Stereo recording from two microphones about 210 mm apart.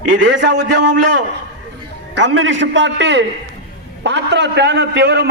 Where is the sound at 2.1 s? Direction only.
80° right; by 5.3 s 50° right (ahead or behind).